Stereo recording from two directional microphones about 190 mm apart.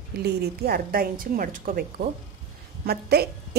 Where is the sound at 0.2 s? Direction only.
55° right (ahead or behind).